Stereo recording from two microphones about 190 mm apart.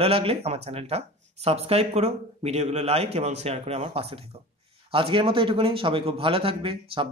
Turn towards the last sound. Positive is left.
turn(degrees=-30)  # may be behind; listen again after turning